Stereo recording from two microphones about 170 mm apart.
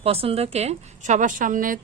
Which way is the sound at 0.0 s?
35° right (ahead or behind).